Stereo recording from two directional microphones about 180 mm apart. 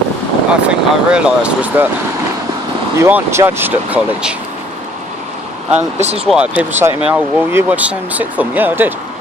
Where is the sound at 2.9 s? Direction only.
15° right (ahead or behind).